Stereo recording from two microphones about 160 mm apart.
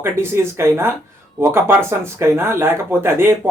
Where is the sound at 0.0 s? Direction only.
15° right (ahead or behind).